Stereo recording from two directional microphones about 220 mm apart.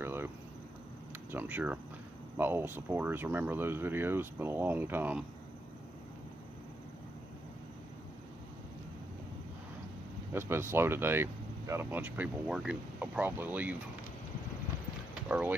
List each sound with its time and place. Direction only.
0.0 s cricket: 10° right (ahead or behind)
1.3 s speech: 5° right (ahead or behind)
10.3 s speech: 10° right (ahead or behind)
15.2 s speech: 5° right (ahead or behind)